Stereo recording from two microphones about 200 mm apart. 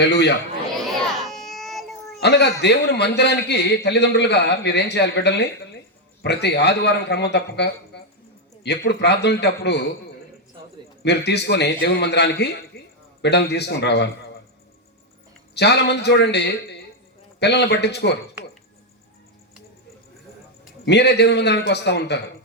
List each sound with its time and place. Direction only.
0.0 s a man's voice: 55° left (ahead or behind)
0.8 s a sound: centre (ahead or behind)
2.2 s a man's voice: 55° left (ahead or behind)
11.0 s a man's voice: 55° left (ahead or behind)
12.7 s a sound: 50° left (ahead or behind)
13.2 s a man's voice: 55° left (ahead or behind)
15.5 s a man's voice: 55° left (ahead or behind)
20.8 s a man's voice: 55° left (ahead or behind)